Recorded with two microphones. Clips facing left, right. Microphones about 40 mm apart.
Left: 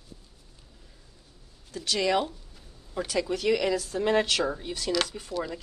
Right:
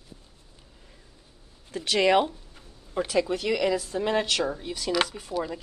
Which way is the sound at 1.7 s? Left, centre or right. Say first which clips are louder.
Right 4 dB; right.